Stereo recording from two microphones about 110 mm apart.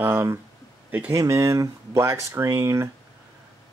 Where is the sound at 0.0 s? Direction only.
25° right (ahead or behind).